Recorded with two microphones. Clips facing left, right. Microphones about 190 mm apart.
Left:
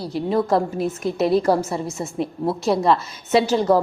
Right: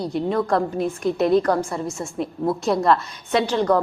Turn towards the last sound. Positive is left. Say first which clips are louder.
# left 3 dB
turn(degrees=5)  # may be behind; listen again after turning